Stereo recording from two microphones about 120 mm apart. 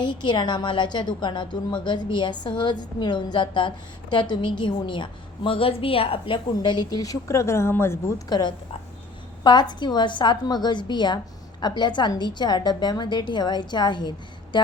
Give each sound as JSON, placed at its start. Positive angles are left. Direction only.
{"t": 0.0, "sound": "a woman's voice", "side_deg": 40}
{"t": 8.3, "sound": "a woman's voice", "side_deg": 35}